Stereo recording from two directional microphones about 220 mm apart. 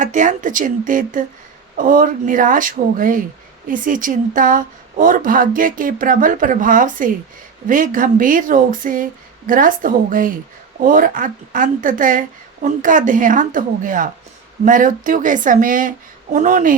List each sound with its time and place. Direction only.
0.0 s speech: 35° right (ahead or behind)